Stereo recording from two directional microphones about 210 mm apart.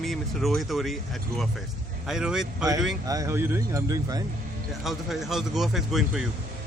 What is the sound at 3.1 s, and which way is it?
Speech, 15° right (ahead or behind).